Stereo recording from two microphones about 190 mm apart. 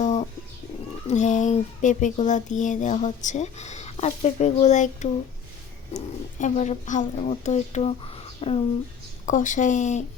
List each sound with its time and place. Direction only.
0.0 s bird: 35° left (ahead or behind)
1.0 s speech: 40° left (ahead or behind)
6.4 s speech: 40° left (ahead or behind)